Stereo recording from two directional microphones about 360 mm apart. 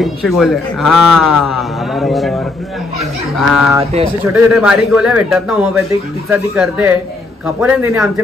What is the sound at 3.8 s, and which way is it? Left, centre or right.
Speech, centre.